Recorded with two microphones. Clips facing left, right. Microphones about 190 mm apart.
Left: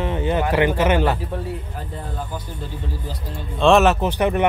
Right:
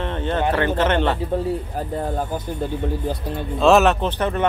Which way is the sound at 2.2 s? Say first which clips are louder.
Right 6 dB; 55° right (ahead or behind).